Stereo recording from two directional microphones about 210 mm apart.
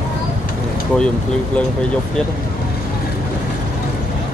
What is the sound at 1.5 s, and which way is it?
Speech, 5° left (ahead or behind).